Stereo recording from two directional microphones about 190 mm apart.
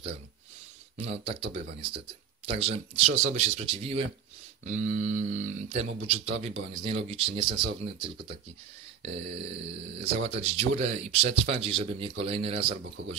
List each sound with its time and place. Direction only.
1.1 s speech: 30° right (ahead or behind)